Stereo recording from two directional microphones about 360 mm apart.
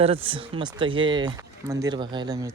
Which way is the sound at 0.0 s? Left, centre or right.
Centre.